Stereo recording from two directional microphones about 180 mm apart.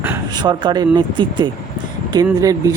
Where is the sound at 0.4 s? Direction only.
25° right (ahead or behind).